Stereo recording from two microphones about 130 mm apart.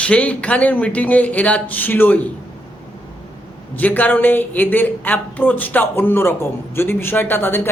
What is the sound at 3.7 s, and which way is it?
Speech, 15° left (ahead or behind).